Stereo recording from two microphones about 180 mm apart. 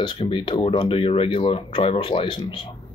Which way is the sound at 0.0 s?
25° left (ahead or behind).